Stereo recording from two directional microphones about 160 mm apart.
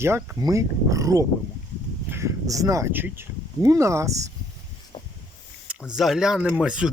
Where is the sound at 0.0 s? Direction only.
15° right (ahead or behind).